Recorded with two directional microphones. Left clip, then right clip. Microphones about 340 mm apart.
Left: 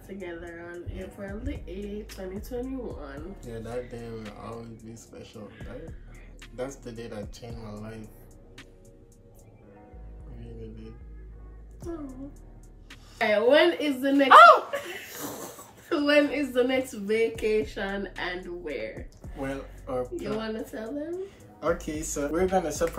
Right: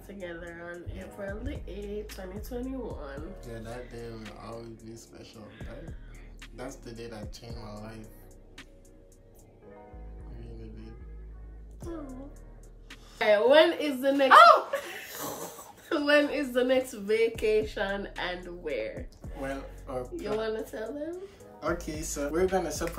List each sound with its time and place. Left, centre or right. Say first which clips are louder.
0.0 s speech: left 2 dB; centre
12.9 s speech: right 1 dB; centre